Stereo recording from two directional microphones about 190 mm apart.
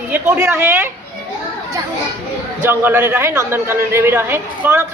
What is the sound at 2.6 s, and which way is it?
A woman's voice, 10° right (ahead or behind).